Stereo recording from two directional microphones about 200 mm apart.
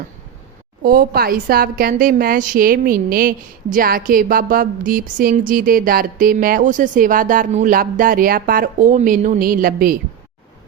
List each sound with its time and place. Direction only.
0.8 s a woman's voice: 45° right (ahead or behind)